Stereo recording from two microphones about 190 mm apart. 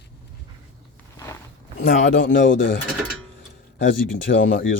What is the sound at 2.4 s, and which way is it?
Speech, 45° left (ahead or behind).